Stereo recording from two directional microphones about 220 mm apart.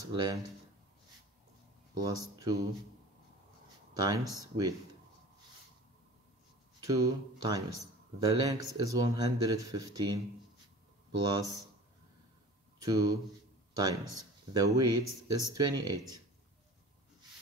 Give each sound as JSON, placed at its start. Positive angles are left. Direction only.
{"t": 0.1, "sound": "speech", "side_deg": -20}
{"t": 2.0, "sound": "speech", "side_deg": -15}
{"t": 3.9, "sound": "speech", "side_deg": -15}
{"t": 6.8, "sound": "speech", "side_deg": -15}
{"t": 12.8, "sound": "speech", "side_deg": -15}